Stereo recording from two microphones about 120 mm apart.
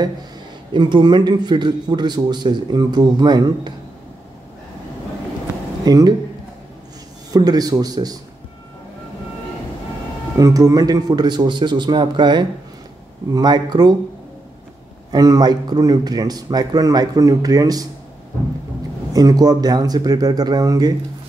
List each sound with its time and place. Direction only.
0.7 s a man's voice: 40° right (ahead or behind)
5.9 s a man's voice: 35° right (ahead or behind)
7.2 s a man's voice: 35° right (ahead or behind)
10.3 s a man's voice: 30° right (ahead or behind)
15.0 s a man's voice: 30° right (ahead or behind)
19.1 s a man's voice: 30° right (ahead or behind)